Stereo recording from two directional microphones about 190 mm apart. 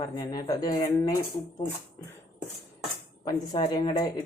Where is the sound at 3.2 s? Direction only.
20° left (ahead or behind).